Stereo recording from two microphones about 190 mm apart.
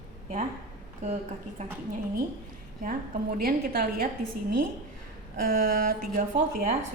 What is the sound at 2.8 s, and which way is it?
Speech, 50° right (ahead or behind).